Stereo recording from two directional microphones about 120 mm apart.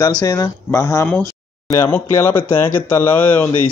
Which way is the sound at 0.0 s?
30° left (ahead or behind).